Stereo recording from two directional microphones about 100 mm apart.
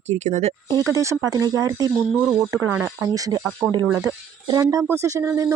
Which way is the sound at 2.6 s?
20° right (ahead or behind).